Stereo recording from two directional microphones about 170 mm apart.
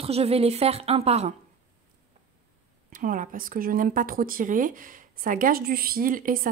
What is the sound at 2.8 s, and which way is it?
Speech, 50° right (ahead or behind).